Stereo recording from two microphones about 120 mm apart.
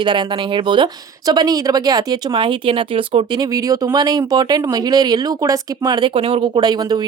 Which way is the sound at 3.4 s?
30° right (ahead or behind).